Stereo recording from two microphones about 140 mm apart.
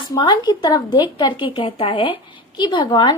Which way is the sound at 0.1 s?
30° left (ahead or behind).